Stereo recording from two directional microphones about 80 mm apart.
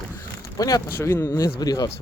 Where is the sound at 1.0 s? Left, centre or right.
Left.